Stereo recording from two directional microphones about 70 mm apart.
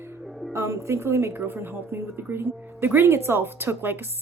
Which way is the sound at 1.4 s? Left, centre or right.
Right.